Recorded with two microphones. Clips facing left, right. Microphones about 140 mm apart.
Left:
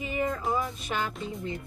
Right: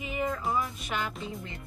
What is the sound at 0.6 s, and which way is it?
Music, 35° left (ahead or behind).